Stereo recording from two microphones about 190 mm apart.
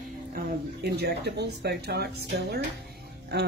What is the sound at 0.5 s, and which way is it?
Speech, 60° right (ahead or behind).